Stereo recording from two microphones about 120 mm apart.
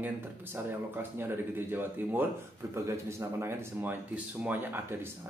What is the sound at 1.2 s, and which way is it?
Speech, 15° right (ahead or behind).